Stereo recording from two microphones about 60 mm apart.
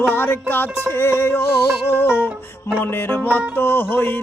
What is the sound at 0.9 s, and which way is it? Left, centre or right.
Music, left.